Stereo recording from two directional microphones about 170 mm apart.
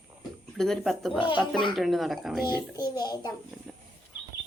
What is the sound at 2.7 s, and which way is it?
Child singing, 25° left (ahead or behind).